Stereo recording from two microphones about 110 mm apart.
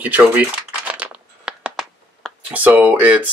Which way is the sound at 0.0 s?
15° right (ahead or behind).